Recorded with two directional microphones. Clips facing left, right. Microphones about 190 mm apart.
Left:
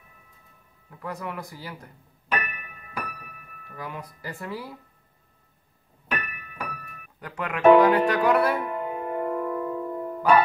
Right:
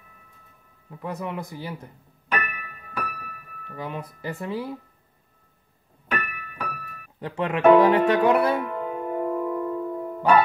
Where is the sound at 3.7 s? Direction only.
25° right (ahead or behind).